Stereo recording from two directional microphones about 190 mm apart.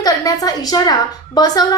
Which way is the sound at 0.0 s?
20° left (ahead or behind).